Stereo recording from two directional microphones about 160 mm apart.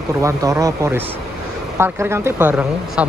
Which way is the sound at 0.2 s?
20° right (ahead or behind).